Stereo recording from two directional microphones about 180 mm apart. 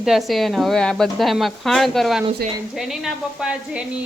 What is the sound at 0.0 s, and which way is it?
Speech, centre (ahead or behind).